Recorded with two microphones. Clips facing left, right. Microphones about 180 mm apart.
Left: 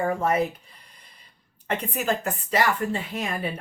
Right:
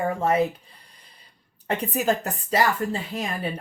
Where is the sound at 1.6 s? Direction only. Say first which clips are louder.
Right 3 dB; 35° right (ahead or behind).